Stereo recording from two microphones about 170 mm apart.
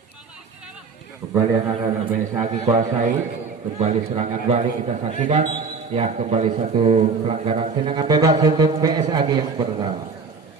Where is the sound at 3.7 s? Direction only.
40° right (ahead or behind).